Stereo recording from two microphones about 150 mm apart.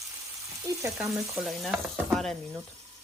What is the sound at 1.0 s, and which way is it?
A woman's voice, 5° right (ahead or behind).